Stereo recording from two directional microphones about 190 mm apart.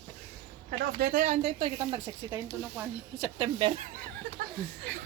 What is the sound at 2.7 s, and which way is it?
Speech, 5° right (ahead or behind).